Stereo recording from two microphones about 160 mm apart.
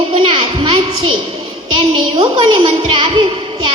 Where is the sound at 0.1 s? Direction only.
30° right (ahead or behind).